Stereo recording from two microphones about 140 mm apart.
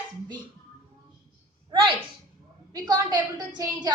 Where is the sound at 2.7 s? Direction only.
30° right (ahead or behind).